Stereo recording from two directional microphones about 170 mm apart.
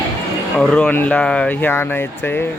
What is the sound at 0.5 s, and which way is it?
A man's voice, 5° left (ahead or behind).